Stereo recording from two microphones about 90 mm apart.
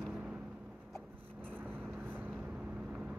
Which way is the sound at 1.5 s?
20° right (ahead or behind).